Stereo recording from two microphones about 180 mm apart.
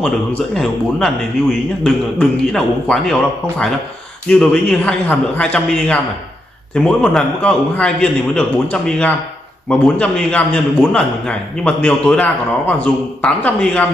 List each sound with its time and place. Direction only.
0.6 s a man's voice: centre (ahead or behind)